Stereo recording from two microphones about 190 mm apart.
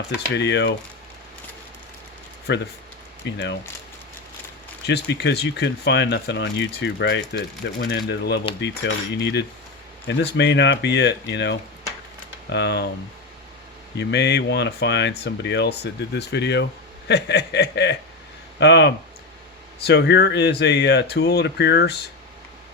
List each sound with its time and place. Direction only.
0.3 s speech: 65° left (ahead or behind)
2.5 s speech: 65° left (ahead or behind)
4.9 s speech: 60° left (ahead or behind)
13.9 s speech: 65° left (ahead or behind)